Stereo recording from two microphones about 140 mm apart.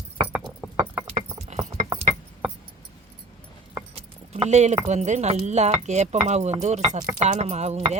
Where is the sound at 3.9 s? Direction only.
50° right (ahead or behind).